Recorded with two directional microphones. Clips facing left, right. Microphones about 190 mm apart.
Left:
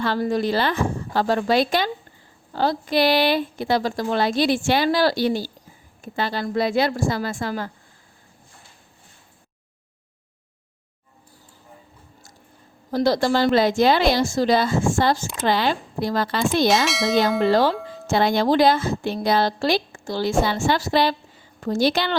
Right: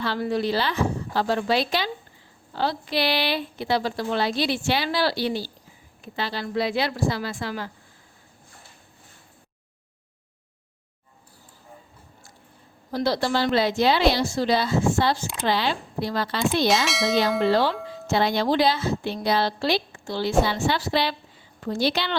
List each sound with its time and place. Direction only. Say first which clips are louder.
0.0 s speech: left 3 dB; 45° left (ahead or behind)
12.9 s speech: left 4 dB; 45° left (ahead or behind)
16.6 s bell: left 2 dB; centre (ahead or behind)
17.5 s speech: left 3 dB; 45° left (ahead or behind)